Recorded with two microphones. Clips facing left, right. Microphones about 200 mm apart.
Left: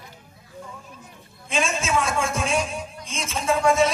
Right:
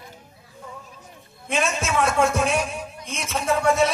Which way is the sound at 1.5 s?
60° right (ahead or behind).